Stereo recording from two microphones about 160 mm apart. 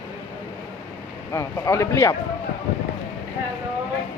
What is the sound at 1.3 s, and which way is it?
Speech, 20° left (ahead or behind).